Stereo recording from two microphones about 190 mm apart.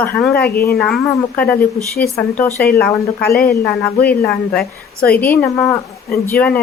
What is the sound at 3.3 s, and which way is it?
Speech, 55° left (ahead or behind).